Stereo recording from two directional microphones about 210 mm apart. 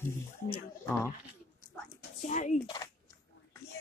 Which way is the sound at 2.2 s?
35° left (ahead or behind).